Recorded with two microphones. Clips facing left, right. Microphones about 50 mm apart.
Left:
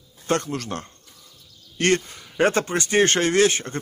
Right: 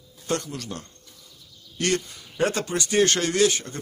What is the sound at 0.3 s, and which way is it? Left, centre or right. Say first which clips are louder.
A man's voice: left 4 dB; left.